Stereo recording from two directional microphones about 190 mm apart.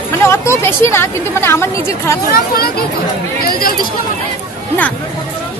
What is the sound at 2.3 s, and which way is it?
Speech, 50° left (ahead or behind).